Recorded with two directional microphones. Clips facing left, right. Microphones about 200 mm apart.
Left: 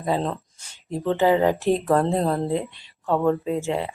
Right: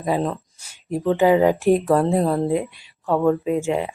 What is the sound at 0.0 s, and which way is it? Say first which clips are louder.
Speech: right 2 dB; 10° right (ahead or behind).